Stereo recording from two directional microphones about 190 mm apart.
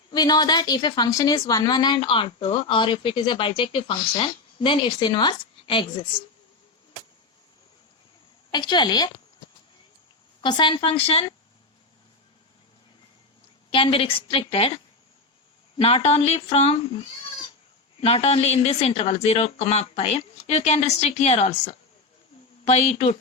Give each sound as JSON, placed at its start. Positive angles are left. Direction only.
{"t": 0.1, "sound": "a woman's voice", "side_deg": 20}
{"t": 8.4, "sound": "a woman's voice", "side_deg": 25}
{"t": 10.4, "sound": "a woman's voice", "side_deg": 25}
{"t": 13.7, "sound": "a woman's voice", "side_deg": 30}
{"t": 15.8, "sound": "speech", "side_deg": 30}
{"t": 18.0, "sound": "speech", "side_deg": 30}